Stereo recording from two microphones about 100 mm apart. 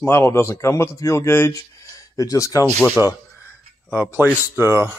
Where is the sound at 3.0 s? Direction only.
25° left (ahead or behind).